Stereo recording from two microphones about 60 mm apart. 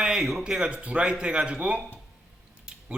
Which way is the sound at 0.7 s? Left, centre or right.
Centre.